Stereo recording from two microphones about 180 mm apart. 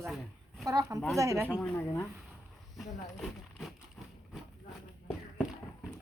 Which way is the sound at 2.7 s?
Centre (ahead or behind).